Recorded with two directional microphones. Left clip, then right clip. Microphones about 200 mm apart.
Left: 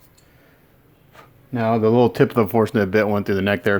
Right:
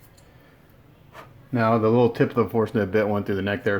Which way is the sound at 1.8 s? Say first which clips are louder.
Left 4 dB; 45° left (ahead or behind).